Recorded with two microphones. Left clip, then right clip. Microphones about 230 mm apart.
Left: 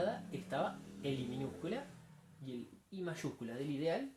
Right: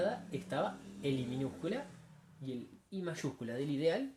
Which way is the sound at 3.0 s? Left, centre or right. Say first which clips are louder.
Right 2 dB; right.